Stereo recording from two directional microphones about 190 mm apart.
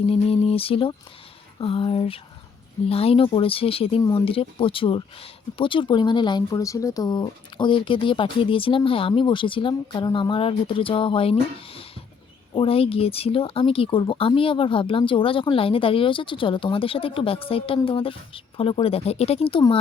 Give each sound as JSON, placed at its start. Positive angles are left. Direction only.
{"t": 0.1, "sound": "speech", "side_deg": 30}